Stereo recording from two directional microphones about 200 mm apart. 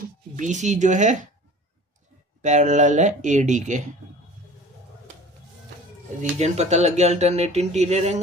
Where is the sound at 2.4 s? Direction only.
35° right (ahead or behind).